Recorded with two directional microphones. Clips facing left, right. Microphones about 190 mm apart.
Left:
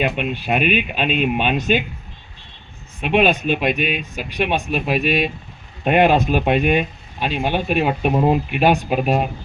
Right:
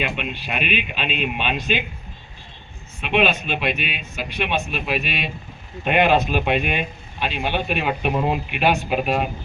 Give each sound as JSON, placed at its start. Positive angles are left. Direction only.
{"t": 0.0, "sound": "speech", "side_deg": 45}
{"t": 3.0, "sound": "speech", "side_deg": 45}